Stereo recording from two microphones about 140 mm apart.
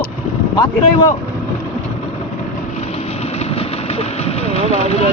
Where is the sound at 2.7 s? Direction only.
50° left (ahead or behind).